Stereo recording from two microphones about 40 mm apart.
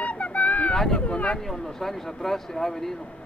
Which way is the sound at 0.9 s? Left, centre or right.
Left.